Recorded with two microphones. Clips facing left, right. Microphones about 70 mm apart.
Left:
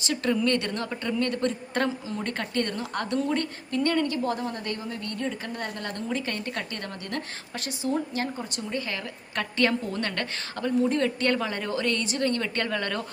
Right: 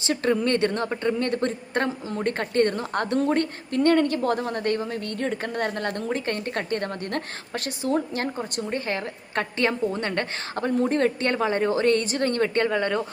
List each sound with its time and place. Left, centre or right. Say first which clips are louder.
0.0 s a woman's voice: right 2 dB; right
12.5 s speech: right 6 dB; right